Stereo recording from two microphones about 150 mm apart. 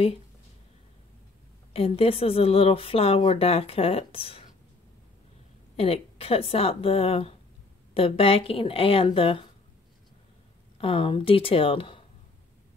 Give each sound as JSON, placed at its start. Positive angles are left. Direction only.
{"t": 1.7, "sound": "a woman's voice", "side_deg": 40}
{"t": 5.8, "sound": "a woman's voice", "side_deg": 40}
{"t": 10.8, "sound": "a woman's voice", "side_deg": 35}